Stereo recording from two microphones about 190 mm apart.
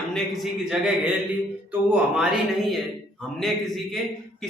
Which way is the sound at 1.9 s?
Centre (ahead or behind).